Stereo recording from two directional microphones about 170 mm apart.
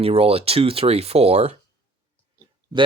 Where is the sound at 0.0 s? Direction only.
35° right (ahead or behind).